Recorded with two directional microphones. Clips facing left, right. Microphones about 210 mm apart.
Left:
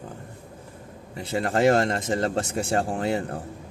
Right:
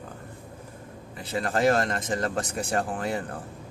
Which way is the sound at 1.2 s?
25° left (ahead or behind).